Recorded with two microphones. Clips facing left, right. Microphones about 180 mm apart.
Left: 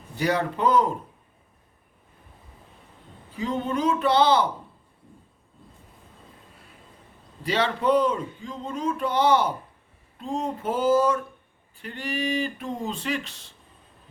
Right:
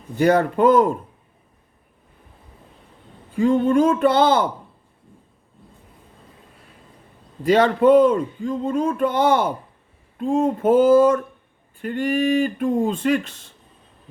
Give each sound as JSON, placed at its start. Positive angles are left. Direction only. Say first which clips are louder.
{"t": 0.2, "sound": "speech", "louder": "right 8 dB", "side_deg": -50}
{"t": 3.3, "sound": "speech", "louder": "right 10 dB", "side_deg": -50}
{"t": 7.4, "sound": "speech", "louder": "right 9 dB", "side_deg": -50}